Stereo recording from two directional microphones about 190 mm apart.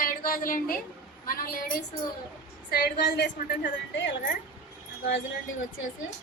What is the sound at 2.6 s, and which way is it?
A woman's voice, 60° left (ahead or behind).